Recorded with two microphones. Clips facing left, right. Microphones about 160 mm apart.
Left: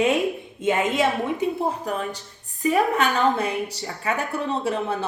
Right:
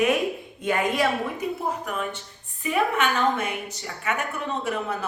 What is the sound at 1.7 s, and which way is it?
A woman's voice, 35° left (ahead or behind).